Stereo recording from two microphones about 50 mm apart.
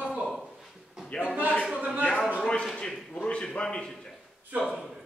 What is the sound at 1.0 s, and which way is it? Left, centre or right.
A man's voice, left.